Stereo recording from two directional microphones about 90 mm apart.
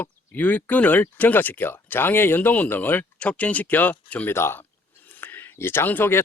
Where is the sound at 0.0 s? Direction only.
20° left (ahead or behind).